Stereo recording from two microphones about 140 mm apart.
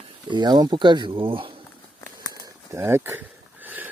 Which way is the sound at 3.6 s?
10° right (ahead or behind).